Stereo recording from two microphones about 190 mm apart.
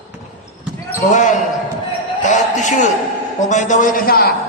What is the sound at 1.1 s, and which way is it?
Basketball bounce, 40° left (ahead or behind).